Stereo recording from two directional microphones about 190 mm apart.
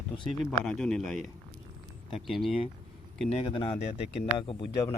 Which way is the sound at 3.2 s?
30° left (ahead or behind).